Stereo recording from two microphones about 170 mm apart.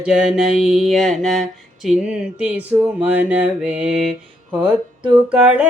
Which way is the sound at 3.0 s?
10° right (ahead or behind).